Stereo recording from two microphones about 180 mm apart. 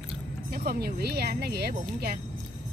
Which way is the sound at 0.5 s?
60° right (ahead or behind).